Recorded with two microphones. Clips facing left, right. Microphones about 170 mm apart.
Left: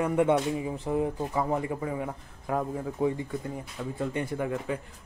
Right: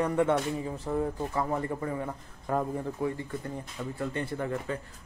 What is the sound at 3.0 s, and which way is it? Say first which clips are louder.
A man's voice: left 4 dB; 15° left (ahead or behind).